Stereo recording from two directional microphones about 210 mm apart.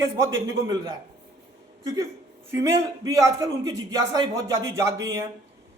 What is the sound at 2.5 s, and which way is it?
A man's voice, 15° right (ahead or behind).